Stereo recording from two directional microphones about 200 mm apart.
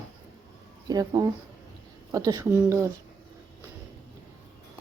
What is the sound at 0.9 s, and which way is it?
Speech, 15° right (ahead or behind).